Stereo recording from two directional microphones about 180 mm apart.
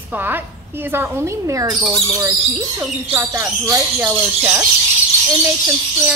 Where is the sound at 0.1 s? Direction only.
10° right (ahead or behind).